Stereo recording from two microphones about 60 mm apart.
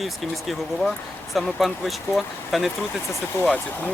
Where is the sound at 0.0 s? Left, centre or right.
Centre.